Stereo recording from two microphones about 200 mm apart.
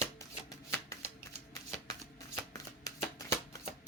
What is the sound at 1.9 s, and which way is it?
Shuffling cards, 15° left (ahead or behind).